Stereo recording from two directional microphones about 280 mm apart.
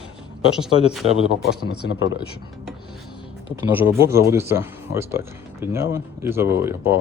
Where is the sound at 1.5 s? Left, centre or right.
Left.